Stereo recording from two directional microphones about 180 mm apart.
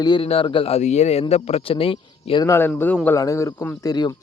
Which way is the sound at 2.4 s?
15° left (ahead or behind).